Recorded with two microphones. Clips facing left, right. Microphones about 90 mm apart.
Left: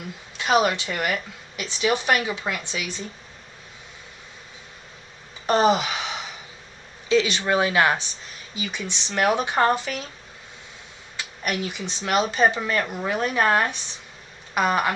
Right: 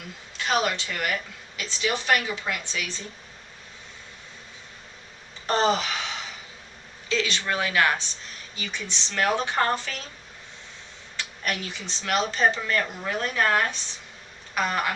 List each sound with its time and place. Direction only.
0.3 s speech: 20° left (ahead or behind)
5.5 s gasp: 15° left (ahead or behind)
7.1 s speech: 15° left (ahead or behind)
11.2 s speech: 15° left (ahead or behind)